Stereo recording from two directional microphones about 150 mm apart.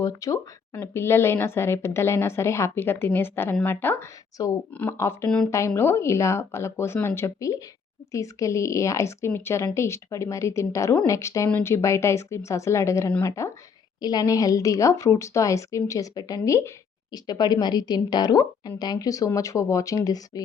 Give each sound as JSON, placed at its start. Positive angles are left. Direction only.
{"t": 0.0, "sound": "a woman's voice", "side_deg": 20}